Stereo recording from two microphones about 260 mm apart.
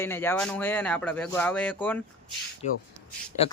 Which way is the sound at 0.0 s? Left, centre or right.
Centre.